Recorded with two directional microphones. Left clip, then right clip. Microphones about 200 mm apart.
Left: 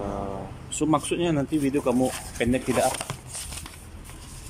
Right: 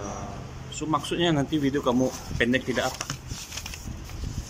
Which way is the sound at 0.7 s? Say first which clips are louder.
Left 2 dB; 15° left (ahead or behind).